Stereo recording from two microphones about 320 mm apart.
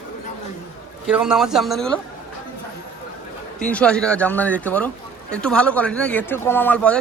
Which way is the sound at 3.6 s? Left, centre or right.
Centre.